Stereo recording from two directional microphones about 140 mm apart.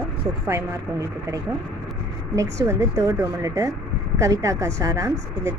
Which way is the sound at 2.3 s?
20° right (ahead or behind).